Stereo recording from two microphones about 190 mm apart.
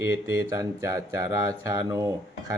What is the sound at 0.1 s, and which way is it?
Speech, 15° right (ahead or behind).